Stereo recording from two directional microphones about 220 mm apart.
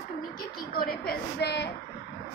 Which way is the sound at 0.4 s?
45° left (ahead or behind).